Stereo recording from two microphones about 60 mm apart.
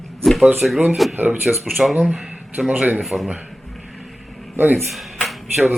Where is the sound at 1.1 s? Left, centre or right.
Right.